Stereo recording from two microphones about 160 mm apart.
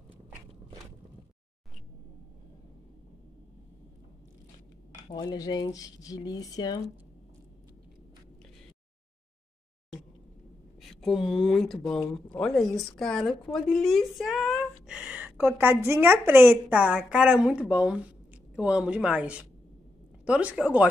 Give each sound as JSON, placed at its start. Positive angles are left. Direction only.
{"t": 5.1, "sound": "speech", "side_deg": 25}
{"t": 10.8, "sound": "a woman's voice", "side_deg": 0}